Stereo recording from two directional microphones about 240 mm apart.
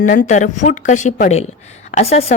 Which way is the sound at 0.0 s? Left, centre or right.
Left.